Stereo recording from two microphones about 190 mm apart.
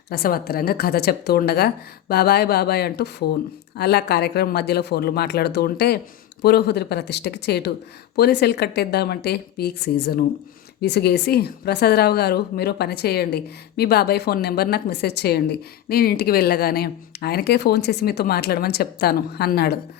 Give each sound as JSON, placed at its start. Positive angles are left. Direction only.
{"t": 0.1, "sound": "a woman's voice", "side_deg": 55}